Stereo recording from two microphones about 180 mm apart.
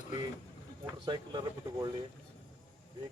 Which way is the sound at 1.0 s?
25° right (ahead or behind).